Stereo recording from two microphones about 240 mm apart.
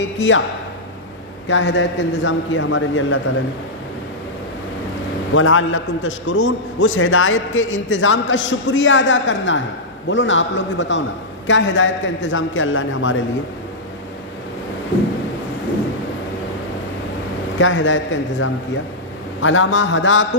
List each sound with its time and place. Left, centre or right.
0.0 s a man's voice: left
1.5 s a man's voice: left
5.3 s a man's voice: left
17.6 s a man's voice: left